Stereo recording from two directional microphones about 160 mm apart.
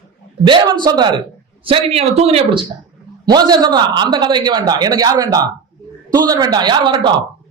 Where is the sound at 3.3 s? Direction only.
25° right (ahead or behind).